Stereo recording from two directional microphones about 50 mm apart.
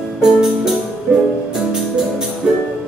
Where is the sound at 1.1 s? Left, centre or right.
Right.